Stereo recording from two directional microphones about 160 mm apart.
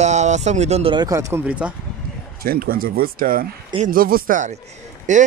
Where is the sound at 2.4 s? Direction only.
70° right (ahead or behind).